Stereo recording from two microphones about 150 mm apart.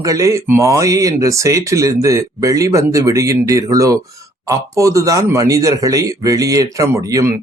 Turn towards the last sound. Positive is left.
turn(degrees=-20)  # may be behind; listen again after turning